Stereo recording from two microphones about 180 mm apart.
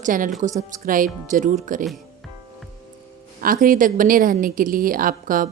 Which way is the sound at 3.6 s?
50° right (ahead or behind).